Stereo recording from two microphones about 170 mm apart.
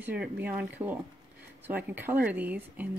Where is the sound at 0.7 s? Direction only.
10° right (ahead or behind).